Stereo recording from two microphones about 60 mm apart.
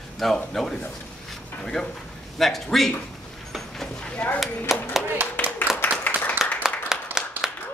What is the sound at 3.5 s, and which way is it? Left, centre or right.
Clip-clop, centre.